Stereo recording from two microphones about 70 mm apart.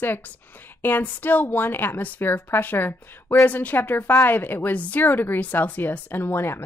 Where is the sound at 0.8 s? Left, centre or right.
Left.